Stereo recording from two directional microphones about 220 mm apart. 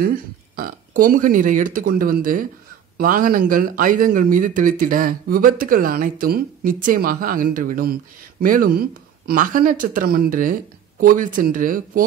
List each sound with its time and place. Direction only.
0.0 s speech: 40° right (ahead or behind)